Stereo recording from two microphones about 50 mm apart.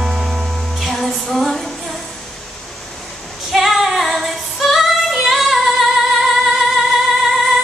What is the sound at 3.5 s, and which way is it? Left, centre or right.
Female singing, centre.